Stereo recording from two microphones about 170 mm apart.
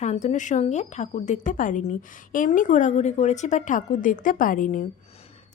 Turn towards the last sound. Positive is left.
turn(degrees=50)  # may be behind; listen again after turning